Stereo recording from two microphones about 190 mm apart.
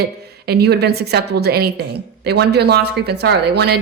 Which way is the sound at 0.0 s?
55° right (ahead or behind).